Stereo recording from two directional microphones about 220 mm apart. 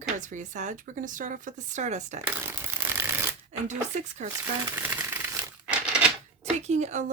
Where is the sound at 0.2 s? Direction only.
35° right (ahead or behind).